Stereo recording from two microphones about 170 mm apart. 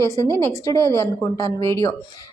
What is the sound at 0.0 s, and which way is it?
A woman's voice, 15° left (ahead or behind).